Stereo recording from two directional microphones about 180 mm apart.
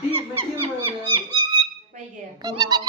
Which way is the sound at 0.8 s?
25° right (ahead or behind).